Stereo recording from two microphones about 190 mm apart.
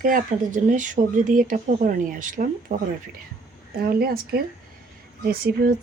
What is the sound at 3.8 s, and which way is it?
Speech, 50° right (ahead or behind).